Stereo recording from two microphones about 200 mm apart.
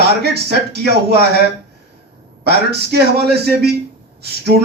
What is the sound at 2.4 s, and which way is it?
A man's voice, 55° right (ahead or behind).